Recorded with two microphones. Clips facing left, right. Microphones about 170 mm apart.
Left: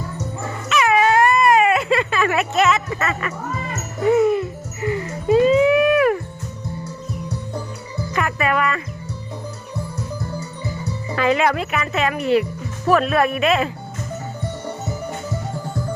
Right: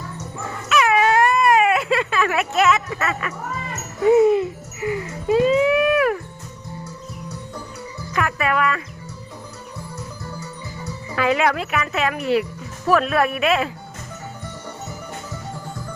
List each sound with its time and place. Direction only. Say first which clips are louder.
0.7 s baby cry: left 1 dB; centre (ahead or behind)
4.1 s a sound: right 2 dB; 20° right (ahead or behind)
4.8 s music: left 1 dB; 5° right (ahead or behind)
8.1 s music: left 1 dB; centre (ahead or behind)
11.1 s speech: left 1 dB; 5° right (ahead or behind)